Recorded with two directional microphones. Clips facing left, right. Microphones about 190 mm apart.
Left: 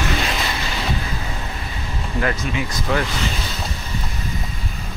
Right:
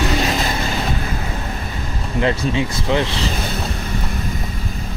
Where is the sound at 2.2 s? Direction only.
25° right (ahead or behind).